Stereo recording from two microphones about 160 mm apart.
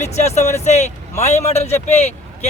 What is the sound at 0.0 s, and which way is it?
Speech, 45° left (ahead or behind).